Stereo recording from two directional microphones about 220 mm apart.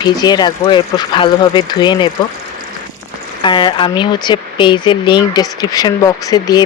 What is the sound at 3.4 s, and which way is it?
Speech, 20° left (ahead or behind).